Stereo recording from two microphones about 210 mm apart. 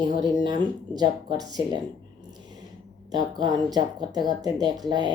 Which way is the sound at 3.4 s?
20° right (ahead or behind).